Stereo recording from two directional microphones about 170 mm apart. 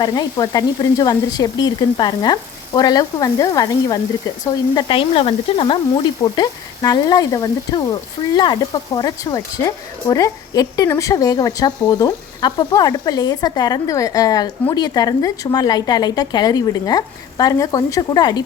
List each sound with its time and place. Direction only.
0.0 s speech: 25° left (ahead or behind)